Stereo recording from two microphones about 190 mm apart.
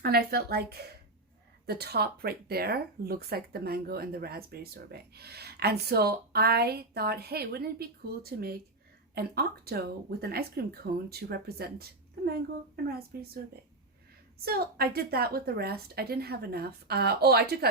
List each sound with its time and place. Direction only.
0.0 s speech: 55° right (ahead or behind)
14.4 s speech: 55° right (ahead or behind)